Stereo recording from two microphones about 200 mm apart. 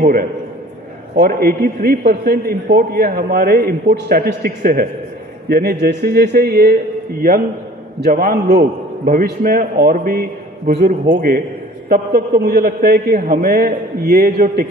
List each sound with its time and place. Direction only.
0.0 s a man's voice: 45° right (ahead or behind)